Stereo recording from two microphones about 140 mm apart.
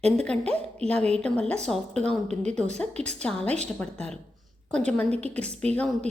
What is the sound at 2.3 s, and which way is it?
Speech, 55° right (ahead or behind).